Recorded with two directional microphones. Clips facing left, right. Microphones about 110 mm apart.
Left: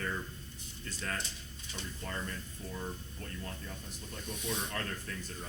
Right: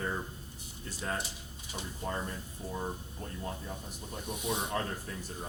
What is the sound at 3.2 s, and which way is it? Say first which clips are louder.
Speech: right 4 dB; 20° right (ahead or behind).